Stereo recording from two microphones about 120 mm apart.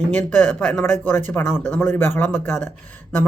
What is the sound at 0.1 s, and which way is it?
Speech, 15° left (ahead or behind).